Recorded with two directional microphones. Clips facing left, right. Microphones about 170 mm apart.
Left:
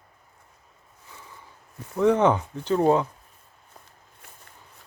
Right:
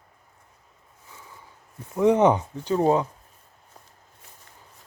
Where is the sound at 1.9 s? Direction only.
15° right (ahead or behind).